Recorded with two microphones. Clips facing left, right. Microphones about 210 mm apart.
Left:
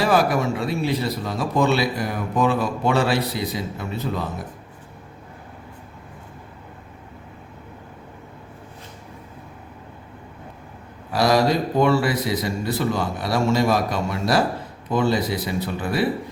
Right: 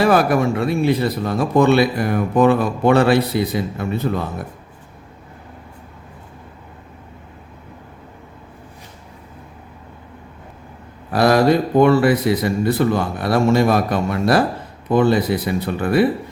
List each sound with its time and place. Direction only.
0.0 s speech: 55° right (ahead or behind)
11.1 s speech: 55° right (ahead or behind)